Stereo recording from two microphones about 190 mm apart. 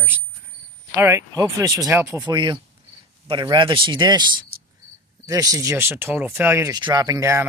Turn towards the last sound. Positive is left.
turn(degrees=-15)  # may be behind; listen again after turning